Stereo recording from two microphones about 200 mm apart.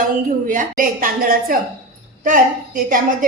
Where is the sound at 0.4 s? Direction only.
40° right (ahead or behind).